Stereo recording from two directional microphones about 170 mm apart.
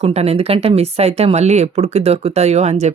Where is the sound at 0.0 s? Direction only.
35° right (ahead or behind).